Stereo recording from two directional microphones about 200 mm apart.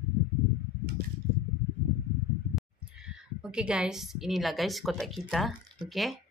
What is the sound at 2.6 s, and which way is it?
A woman's voice, 5° right (ahead or behind).